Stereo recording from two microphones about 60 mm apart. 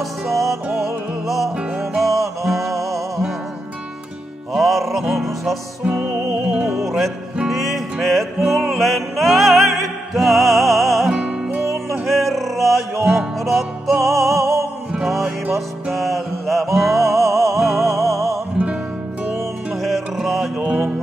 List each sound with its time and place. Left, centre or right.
0.3 s music: centre
4.6 s music: centre
5.9 s music: right
6.8 s music: centre
11.1 s music: centre
11.9 s music: centre
15.9 s music: centre
19.8 s music: centre